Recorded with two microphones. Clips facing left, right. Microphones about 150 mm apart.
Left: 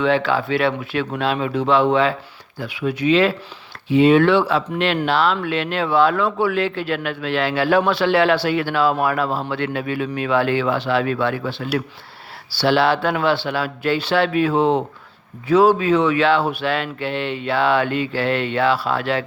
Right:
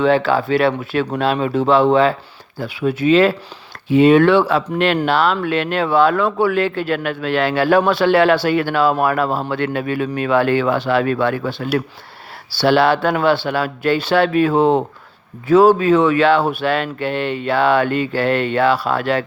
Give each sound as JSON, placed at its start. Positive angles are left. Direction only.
{"t": 0.0, "sound": "speech", "side_deg": -40}